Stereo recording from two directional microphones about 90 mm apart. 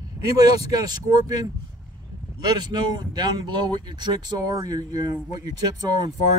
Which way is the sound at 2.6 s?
55° right (ahead or behind).